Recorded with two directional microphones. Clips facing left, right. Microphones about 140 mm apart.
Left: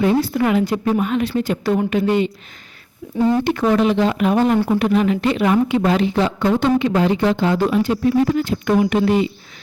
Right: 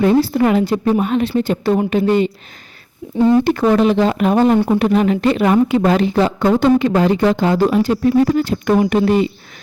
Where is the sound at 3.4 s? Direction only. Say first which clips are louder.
Right 3 dB; 40° right (ahead or behind).